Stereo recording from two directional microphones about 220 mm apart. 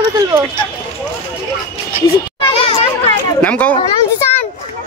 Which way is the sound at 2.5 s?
25° left (ahead or behind).